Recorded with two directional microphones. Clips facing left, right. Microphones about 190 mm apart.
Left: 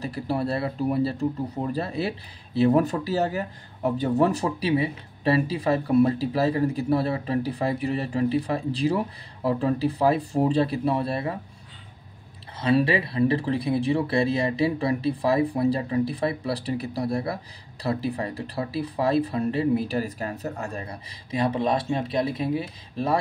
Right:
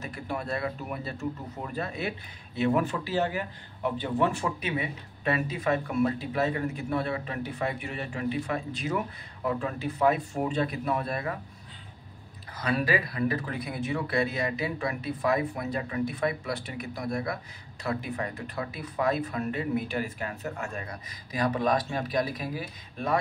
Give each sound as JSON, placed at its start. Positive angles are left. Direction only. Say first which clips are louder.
{"t": 0.0, "sound": "speech", "louder": "left 7 dB", "side_deg": 35}
{"t": 12.5, "sound": "speech", "louder": "left 6 dB", "side_deg": 25}